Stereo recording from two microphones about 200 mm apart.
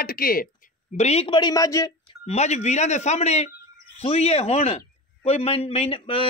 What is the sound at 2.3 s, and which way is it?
A man's voice, 35° left (ahead or behind).